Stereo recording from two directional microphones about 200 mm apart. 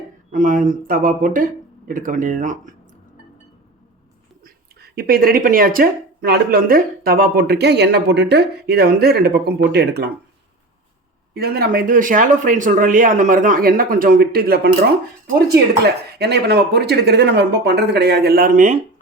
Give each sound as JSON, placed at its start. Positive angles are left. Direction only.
{"t": 0.3, "sound": "speech", "side_deg": -40}
{"t": 4.4, "sound": "speech", "side_deg": -50}
{"t": 11.3, "sound": "speech", "side_deg": -50}